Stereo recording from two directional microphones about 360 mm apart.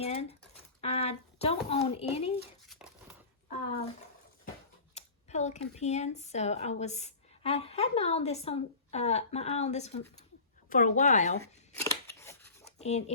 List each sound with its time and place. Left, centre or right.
0.0 s speech: centre
2.6 s a sound: centre
4.9 s a woman's voice: centre
11.7 s scissors: centre
12.8 s speech: centre